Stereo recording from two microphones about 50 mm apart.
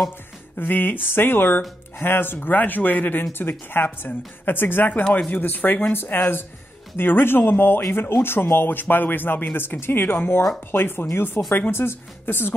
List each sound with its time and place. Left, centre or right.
0.6 s speech: left